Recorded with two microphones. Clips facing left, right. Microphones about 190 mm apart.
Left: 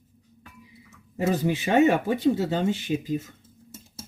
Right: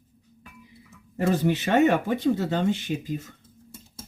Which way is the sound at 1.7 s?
15° left (ahead or behind).